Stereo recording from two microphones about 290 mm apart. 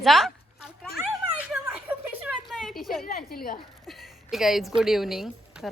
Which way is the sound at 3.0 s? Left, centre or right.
Left.